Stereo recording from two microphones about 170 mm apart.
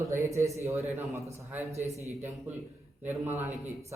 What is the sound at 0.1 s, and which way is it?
A man's voice, 15° right (ahead or behind).